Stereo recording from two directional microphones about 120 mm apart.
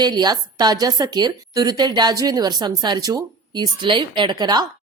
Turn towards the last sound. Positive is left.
turn(degrees=-35)  # may be behind; listen again after turning